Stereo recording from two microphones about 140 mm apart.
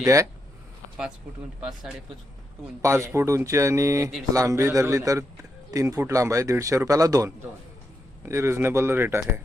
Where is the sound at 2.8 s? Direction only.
20° right (ahead or behind).